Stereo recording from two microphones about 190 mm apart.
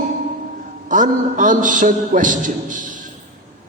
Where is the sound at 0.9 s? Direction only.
40° right (ahead or behind).